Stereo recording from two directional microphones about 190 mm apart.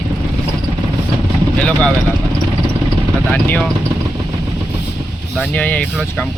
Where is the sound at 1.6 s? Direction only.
5° left (ahead or behind).